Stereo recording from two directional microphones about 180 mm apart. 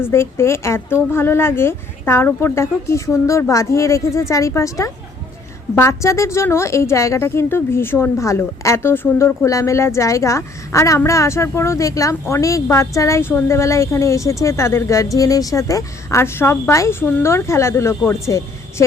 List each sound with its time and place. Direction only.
0.0 s a woman's voice: 15° left (ahead or behind)